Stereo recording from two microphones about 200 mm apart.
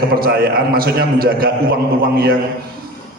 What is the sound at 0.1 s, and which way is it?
A man's voice, 50° right (ahead or behind).